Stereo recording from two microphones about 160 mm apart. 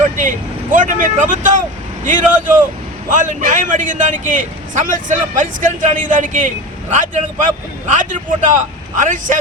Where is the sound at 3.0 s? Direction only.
55° right (ahead or behind).